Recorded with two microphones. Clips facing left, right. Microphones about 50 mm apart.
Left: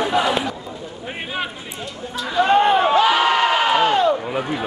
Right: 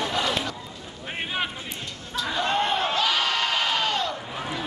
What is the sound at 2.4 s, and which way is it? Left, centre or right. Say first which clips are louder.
Crowd: left 11 dB; left.